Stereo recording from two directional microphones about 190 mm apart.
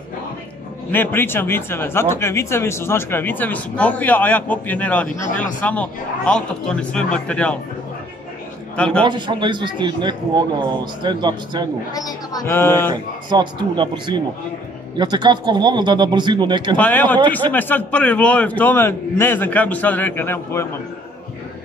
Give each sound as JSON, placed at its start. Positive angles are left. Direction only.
{"t": 0.9, "sound": "speech", "side_deg": 10}
{"t": 8.7, "sound": "a man's voice", "side_deg": 5}
{"t": 9.0, "sound": "speech", "side_deg": -25}
{"t": 11.9, "sound": "speech", "side_deg": 20}
{"t": 12.9, "sound": "speech", "side_deg": -25}
{"t": 16.7, "sound": "speech", "side_deg": 10}